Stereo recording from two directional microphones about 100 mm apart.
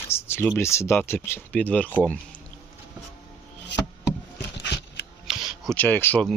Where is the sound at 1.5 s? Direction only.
15° left (ahead or behind).